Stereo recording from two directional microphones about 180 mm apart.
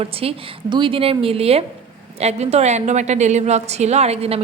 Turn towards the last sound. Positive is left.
turn(degrees=-35)  # may be behind; listen again after turning